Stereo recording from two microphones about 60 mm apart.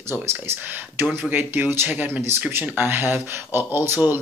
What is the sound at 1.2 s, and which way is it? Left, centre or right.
Speech, right.